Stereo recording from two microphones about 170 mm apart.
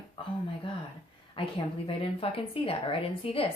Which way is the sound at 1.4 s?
30° left (ahead or behind).